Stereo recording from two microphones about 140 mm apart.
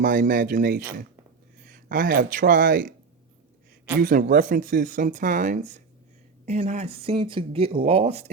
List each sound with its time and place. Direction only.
0.0 s speech: 75° right (ahead or behind)
3.9 s speech: 80° right; by 8.3 s 45° right (ahead or behind)